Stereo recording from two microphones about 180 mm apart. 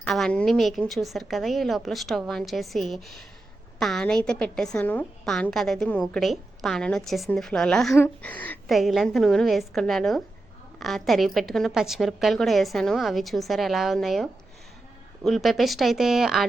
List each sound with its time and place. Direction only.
0.0 s a woman's voice: 5° left (ahead or behind)